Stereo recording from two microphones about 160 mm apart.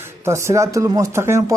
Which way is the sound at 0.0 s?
15° right (ahead or behind).